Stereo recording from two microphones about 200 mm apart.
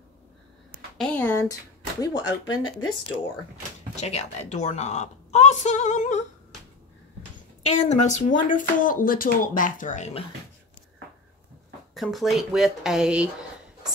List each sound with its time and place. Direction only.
0.9 s speech: 5° left (ahead or behind)
3.9 s a woman's voice: 35° left (ahead or behind)
7.6 s a woman's voice: 35° left (ahead or behind)
11.9 s speech: centre (ahead or behind)